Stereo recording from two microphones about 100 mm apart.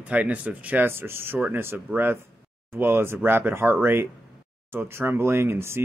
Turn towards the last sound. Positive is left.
turn(degrees=-25)  # may be behind; listen again after turning